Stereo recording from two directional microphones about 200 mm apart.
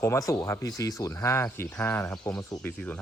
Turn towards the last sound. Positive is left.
turn(degrees=10)  # may be behind; listen again after turning